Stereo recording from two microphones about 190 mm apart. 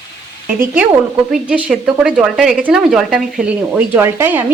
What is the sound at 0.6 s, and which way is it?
A woman's voice, 10° right (ahead or behind).